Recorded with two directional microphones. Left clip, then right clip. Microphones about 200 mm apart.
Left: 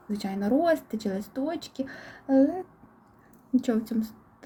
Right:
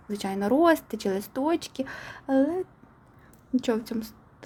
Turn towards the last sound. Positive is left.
turn(degrees=-25)  # may be behind; listen again after turning